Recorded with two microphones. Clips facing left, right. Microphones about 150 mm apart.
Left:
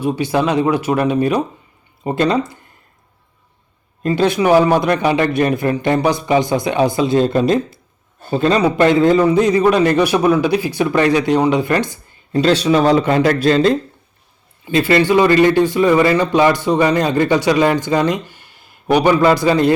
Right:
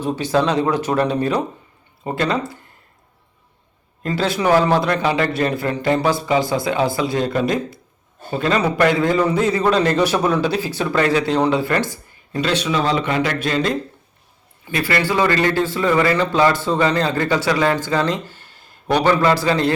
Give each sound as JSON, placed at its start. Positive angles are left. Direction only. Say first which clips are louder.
{"t": 0.0, "sound": "speech", "louder": "left 2 dB", "side_deg": 10}
{"t": 4.0, "sound": "speech", "louder": "left 5 dB", "side_deg": 15}
{"t": 12.4, "sound": "a man's voice", "louder": "left 7 dB", "side_deg": 35}